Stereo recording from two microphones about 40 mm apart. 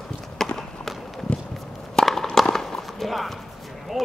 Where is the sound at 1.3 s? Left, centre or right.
Left.